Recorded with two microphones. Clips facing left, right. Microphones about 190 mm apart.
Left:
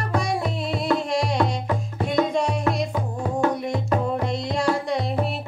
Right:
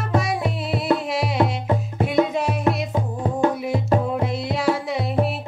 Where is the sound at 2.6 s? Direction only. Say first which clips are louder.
Right 2 dB; 25° right (ahead or behind).